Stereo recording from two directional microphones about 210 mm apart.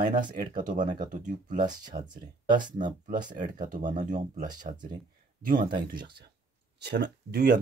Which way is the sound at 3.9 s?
35° right (ahead or behind).